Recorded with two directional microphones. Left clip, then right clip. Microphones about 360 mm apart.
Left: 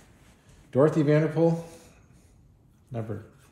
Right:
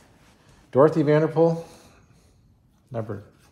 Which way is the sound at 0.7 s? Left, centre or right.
Centre.